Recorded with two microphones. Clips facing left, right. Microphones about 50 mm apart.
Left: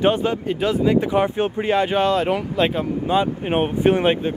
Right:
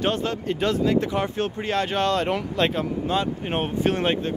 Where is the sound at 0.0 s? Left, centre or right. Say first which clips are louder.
Left 6 dB; centre.